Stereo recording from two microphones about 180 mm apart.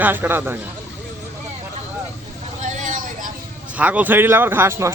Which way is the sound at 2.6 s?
45° right (ahead or behind).